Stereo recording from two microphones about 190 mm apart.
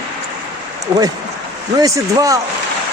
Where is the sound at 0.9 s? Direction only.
30° right (ahead or behind).